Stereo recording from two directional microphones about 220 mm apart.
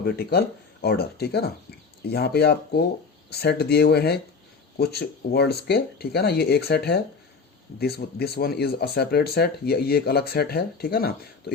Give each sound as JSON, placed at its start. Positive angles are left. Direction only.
{"t": 0.0, "sound": "speech", "side_deg": 45}